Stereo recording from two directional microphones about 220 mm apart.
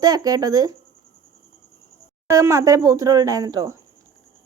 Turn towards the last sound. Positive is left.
turn(degrees=-15)  # may be behind; listen again after turning